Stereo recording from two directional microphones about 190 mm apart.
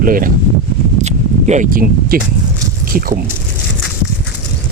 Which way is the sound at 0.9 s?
40° right (ahead or behind).